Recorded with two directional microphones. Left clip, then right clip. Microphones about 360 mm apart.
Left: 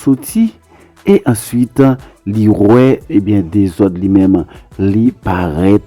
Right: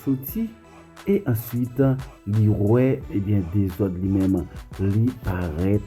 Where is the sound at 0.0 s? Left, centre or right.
Left.